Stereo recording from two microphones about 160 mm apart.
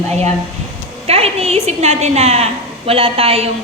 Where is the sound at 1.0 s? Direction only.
40° right (ahead or behind).